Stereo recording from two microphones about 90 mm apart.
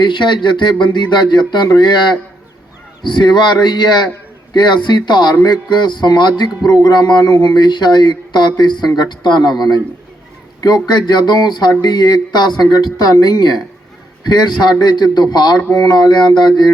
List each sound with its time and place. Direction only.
0.0 s speech: 60° left (ahead or behind)
10.9 s speech: 55° left (ahead or behind)